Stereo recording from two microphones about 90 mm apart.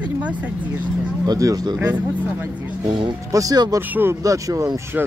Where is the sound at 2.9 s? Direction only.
65° right (ahead or behind).